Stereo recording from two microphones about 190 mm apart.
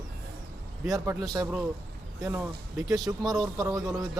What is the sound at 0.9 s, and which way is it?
A man's voice, 20° right (ahead or behind).